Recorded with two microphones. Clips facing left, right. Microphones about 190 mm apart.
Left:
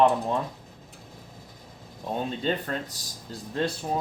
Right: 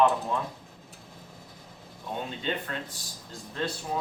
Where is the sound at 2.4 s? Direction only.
40° left (ahead or behind).